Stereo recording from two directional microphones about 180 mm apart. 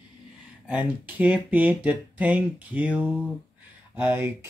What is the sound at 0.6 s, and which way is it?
Mantra, 10° right (ahead or behind).